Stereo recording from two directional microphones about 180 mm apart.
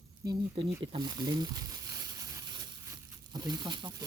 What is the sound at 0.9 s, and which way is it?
Speech, 25° right (ahead or behind).